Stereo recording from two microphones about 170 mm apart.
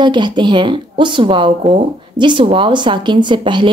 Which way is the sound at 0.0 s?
25° right (ahead or behind).